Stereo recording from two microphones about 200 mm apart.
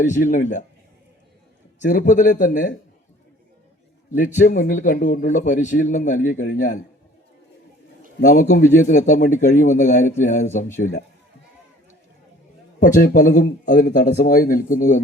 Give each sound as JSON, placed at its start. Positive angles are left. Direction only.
{"t": 0.0, "sound": "a man's voice", "side_deg": 40}
{"t": 1.8, "sound": "a man's voice", "side_deg": 40}
{"t": 4.4, "sound": "a man's voice", "side_deg": 45}
{"t": 8.3, "sound": "a man's voice", "side_deg": 40}
{"t": 12.8, "sound": "a man's voice", "side_deg": 40}